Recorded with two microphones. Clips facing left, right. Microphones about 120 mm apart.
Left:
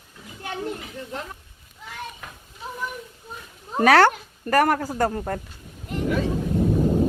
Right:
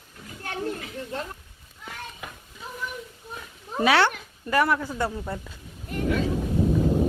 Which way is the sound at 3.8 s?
45° left (ahead or behind).